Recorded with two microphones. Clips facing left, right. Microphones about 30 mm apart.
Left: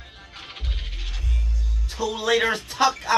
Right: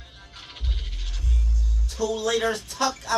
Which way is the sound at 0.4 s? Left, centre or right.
Centre.